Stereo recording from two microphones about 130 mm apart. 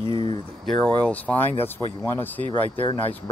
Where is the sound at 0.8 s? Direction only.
10° left (ahead or behind).